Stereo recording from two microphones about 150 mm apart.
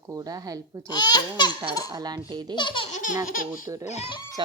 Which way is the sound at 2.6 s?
35° left (ahead or behind).